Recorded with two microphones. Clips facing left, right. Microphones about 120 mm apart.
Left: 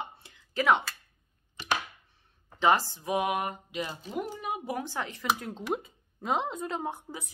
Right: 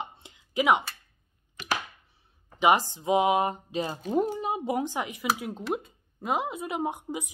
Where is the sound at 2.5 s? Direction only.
15° right (ahead or behind).